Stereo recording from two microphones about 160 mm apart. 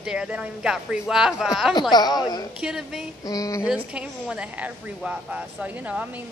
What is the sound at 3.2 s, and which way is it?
Speech, 20° left (ahead or behind).